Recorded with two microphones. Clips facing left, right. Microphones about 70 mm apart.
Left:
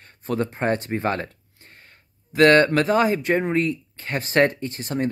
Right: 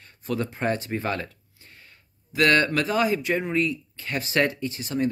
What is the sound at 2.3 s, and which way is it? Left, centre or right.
Speech, left.